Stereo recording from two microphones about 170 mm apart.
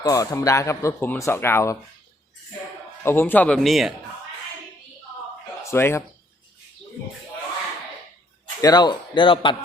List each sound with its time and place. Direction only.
0.0 s speech: 20° left (ahead or behind)
3.0 s speech: 15° left (ahead or behind)
5.7 s speech: 15° left (ahead or behind)
8.6 s speech: 25° left (ahead or behind)